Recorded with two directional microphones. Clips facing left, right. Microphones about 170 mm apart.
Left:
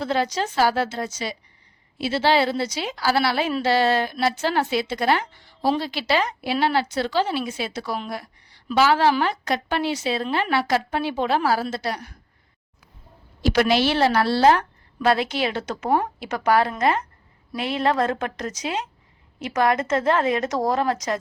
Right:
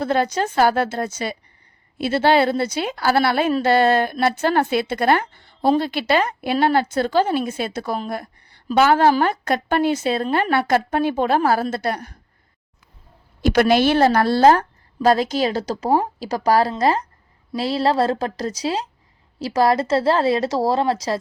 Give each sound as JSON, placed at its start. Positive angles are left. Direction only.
{"t": 0.0, "sound": "a woman's voice", "side_deg": -55}
{"t": 13.4, "sound": "a woman's voice", "side_deg": -50}